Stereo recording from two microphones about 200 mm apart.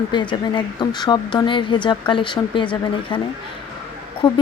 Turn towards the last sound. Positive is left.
turn(degrees=25)  # may be behind; listen again after turning